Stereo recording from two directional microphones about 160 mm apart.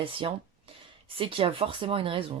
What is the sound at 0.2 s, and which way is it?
Speech, 35° right (ahead or behind).